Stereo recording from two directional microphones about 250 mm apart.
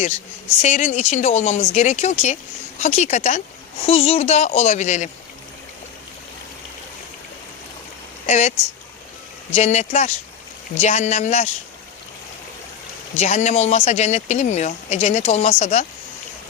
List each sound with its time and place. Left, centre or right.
0.6 s speech: left
8.3 s speech: left
9.6 s speech: left
13.1 s speech: left